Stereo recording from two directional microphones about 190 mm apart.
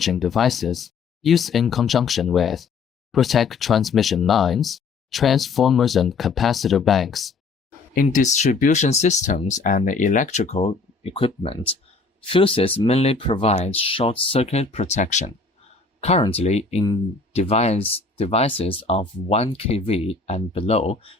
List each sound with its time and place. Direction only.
0.0 s speech: centre (ahead or behind)
8.0 s speech: 40° left (ahead or behind)